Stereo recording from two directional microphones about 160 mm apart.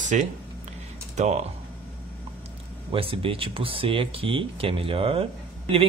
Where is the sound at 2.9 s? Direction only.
35° right (ahead or behind).